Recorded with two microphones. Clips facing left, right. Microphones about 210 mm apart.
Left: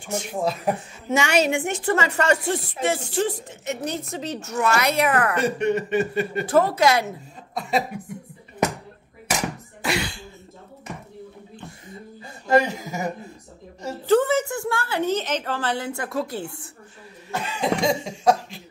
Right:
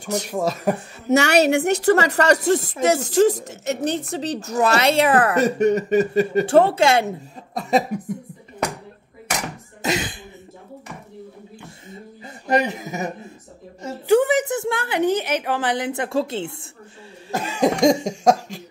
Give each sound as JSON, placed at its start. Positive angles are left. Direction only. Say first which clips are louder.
{"t": 0.0, "sound": "a woman's voice", "louder": "right 3 dB", "side_deg": -40}
{"t": 1.1, "sound": "a woman's voice", "louder": "right 5 dB", "side_deg": -70}
{"t": 2.0, "sound": "a woman's voice", "louder": "right 5 dB", "side_deg": -40}
{"t": 6.4, "sound": "a woman's voice", "louder": "right 2 dB", "side_deg": -30}
{"t": 7.5, "sound": "speech", "louder": "right 4 dB", "side_deg": -40}
{"t": 9.8, "sound": "cough", "louder": "right 3 dB", "side_deg": -20}
{"t": 12.4, "sound": "a woman's voice", "louder": "left 1 dB", "side_deg": -20}
{"t": 17.3, "sound": "cough", "louder": "right 5 dB", "side_deg": -40}